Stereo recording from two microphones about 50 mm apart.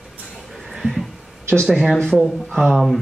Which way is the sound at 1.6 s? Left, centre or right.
Centre.